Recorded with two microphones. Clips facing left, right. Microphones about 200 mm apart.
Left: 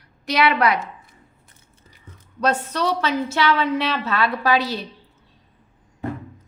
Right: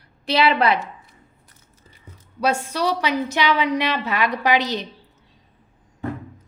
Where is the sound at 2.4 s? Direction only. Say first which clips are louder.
Even; 10° right (ahead or behind).